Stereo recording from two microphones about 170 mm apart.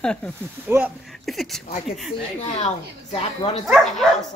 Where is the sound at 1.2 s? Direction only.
Centre (ahead or behind).